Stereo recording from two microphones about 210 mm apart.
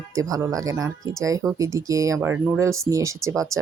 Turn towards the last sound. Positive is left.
turn(degrees=-15)  # may be behind; listen again after turning